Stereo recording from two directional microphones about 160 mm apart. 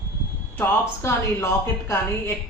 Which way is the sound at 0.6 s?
15° left (ahead or behind).